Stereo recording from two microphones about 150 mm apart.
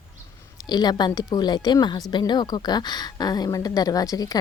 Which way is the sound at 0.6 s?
25° left (ahead or behind).